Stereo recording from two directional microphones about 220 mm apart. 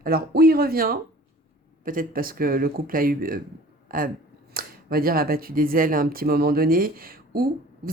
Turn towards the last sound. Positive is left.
turn(degrees=-45)  # may be behind; listen again after turning